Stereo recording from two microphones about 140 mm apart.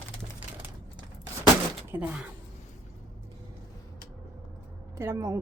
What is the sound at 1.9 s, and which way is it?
Speech, 10° right (ahead or behind).